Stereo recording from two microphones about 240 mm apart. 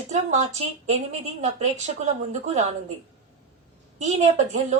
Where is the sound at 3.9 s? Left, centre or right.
Right.